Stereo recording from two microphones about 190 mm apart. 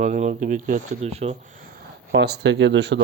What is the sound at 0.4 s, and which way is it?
Speech, 45° right (ahead or behind).